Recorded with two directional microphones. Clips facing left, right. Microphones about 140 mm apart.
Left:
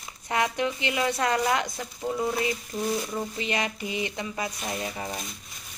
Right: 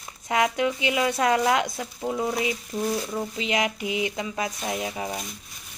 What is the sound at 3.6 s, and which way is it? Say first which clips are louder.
Speech: right 4 dB; 10° right (ahead or behind).